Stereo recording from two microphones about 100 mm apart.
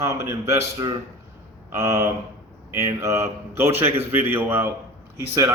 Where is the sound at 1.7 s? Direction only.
30° right (ahead or behind).